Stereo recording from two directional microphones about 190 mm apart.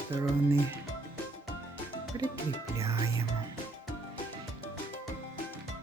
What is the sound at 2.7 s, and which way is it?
Speech, 15° right (ahead or behind).